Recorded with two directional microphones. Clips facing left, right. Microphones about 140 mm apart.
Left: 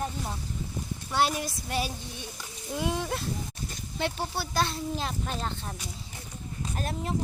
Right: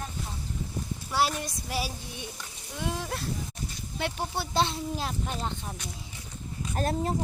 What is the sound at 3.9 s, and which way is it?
Speech, 10° right (ahead or behind).